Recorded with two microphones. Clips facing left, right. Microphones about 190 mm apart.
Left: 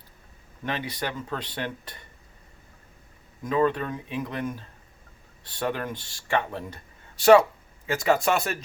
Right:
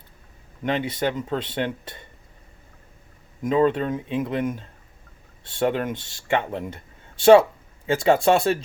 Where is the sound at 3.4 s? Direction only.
20° right (ahead or behind).